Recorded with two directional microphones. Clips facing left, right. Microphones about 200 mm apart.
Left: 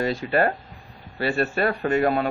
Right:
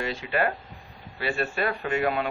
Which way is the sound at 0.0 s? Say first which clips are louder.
Left 5 dB; 40° left (ahead or behind).